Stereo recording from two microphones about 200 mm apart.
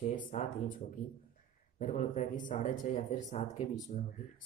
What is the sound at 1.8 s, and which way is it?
Speech, 40° left (ahead or behind).